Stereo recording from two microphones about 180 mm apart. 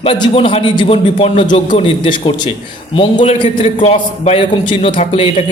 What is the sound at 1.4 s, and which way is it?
A man's voice, 45° left (ahead or behind).